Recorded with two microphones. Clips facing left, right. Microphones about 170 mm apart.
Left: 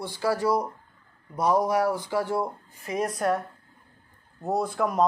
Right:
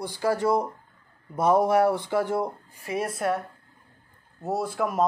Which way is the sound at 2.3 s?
20° right (ahead or behind).